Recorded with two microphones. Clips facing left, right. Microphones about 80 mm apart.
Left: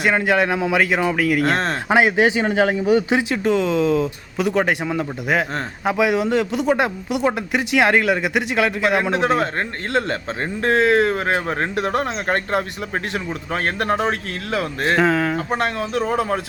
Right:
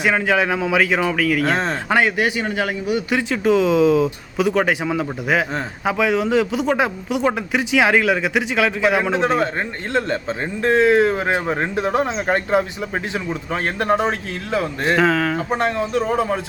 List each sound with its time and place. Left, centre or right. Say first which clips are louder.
0.0 s speech: even; centre
1.9 s speech: left 3 dB; centre
3.2 s speech: right 2 dB; centre